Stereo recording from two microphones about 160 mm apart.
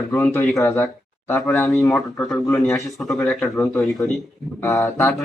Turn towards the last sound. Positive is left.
turn(degrees=15)  # may be behind; listen again after turning